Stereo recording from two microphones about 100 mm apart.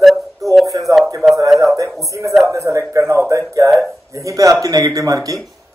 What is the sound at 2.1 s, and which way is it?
Speech, 30° right (ahead or behind).